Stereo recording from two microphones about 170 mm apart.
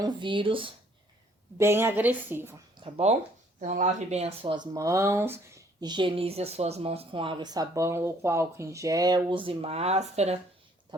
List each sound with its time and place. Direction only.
0.0 s speech: 25° right (ahead or behind)
1.5 s a woman's voice: 15° right (ahead or behind)
2.7 s speech: 35° right (ahead or behind)
3.6 s speech: 45° right (ahead or behind)